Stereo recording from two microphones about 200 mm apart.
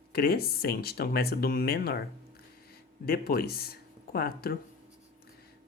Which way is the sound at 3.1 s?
50° left (ahead or behind).